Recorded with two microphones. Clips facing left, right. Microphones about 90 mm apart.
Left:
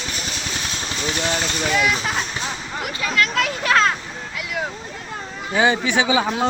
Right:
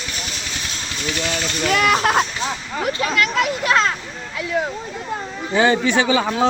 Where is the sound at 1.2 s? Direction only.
25° left (ahead or behind).